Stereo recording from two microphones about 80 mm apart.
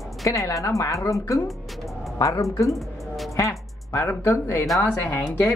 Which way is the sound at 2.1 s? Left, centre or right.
Left.